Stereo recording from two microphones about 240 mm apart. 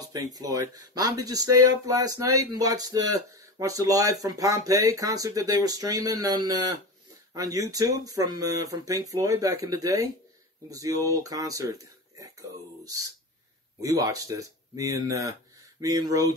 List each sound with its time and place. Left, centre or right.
0.0 s speech: centre